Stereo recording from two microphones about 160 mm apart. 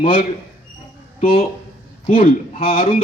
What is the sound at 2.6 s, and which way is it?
Speech, 60° left (ahead or behind).